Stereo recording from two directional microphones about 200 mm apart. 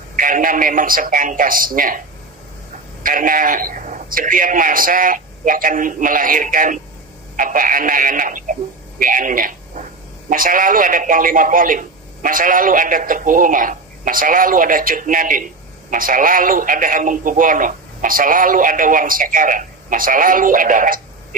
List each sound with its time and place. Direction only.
0.1 s speech: 40° right (ahead or behind)
3.0 s speech: 45° right (ahead or behind)